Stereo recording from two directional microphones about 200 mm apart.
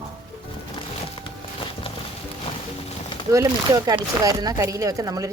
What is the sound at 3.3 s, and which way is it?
Speech, 15° right (ahead or behind).